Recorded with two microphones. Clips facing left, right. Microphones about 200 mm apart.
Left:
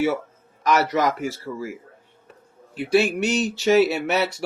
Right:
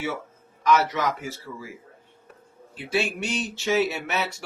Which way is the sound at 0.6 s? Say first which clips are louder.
Left 2 dB; 75° left (ahead or behind).